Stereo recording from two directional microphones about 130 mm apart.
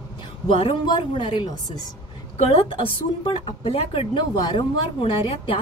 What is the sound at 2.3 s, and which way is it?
Speech, 55° left (ahead or behind).